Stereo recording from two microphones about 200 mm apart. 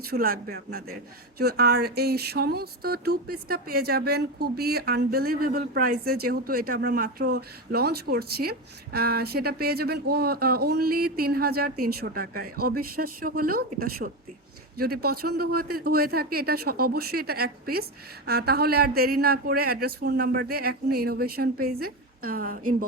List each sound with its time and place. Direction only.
0.1 s speech: 50° right (ahead or behind)